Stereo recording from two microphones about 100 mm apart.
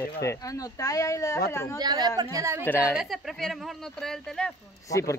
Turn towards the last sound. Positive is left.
turn(degrees=35)  # may be behind; listen again after turning